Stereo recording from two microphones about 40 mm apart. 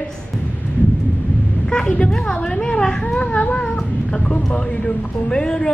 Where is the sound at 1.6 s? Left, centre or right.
Centre.